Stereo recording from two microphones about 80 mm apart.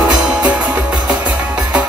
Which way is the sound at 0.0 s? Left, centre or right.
Centre.